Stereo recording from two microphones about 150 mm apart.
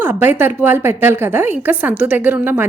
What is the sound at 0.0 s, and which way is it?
A woman's voice, 15° right (ahead or behind).